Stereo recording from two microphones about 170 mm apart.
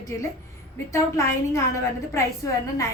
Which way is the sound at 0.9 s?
20° left (ahead or behind).